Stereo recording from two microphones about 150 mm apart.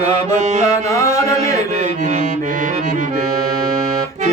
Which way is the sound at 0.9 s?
20° left (ahead or behind).